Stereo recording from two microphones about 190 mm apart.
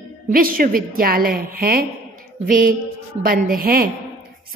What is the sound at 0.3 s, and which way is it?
A woman's voice, 50° right (ahead or behind).